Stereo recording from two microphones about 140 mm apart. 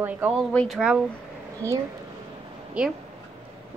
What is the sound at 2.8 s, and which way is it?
Speech, 5° right (ahead or behind).